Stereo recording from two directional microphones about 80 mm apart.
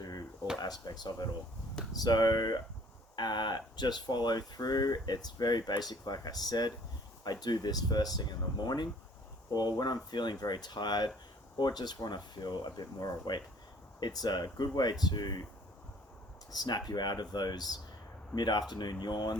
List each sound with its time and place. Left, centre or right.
0.0 s a sound: left
0.6 s speech: left
16.5 s speech: left